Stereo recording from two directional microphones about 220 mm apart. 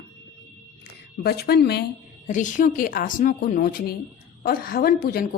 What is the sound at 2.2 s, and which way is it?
A woman's voice, 35° left (ahead or behind).